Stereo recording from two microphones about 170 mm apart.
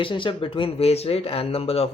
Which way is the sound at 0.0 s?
30° left (ahead or behind).